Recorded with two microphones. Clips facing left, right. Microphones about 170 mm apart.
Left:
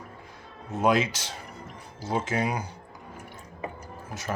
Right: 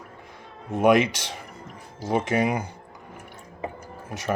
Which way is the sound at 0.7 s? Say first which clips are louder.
Right 5 dB; 60° right (ahead or behind).